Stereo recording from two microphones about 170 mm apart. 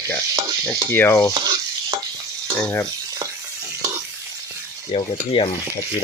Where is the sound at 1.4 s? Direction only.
25° right (ahead or behind).